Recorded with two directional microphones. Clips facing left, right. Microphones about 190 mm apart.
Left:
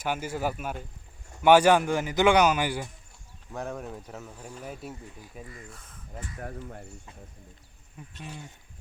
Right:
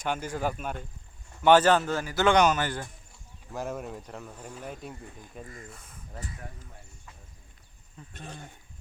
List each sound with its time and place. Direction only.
0.0 s a man's voice: 10° left (ahead or behind)
3.5 s speech: centre (ahead or behind)
6.4 s speech: 55° left (ahead or behind)
8.0 s a man's voice: 10° left (ahead or behind)